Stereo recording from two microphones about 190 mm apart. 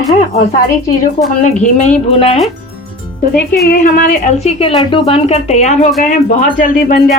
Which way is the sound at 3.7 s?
45° left (ahead or behind).